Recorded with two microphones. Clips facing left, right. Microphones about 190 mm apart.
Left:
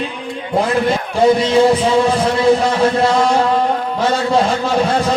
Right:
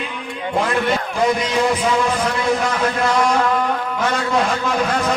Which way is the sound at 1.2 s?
30° left (ahead or behind).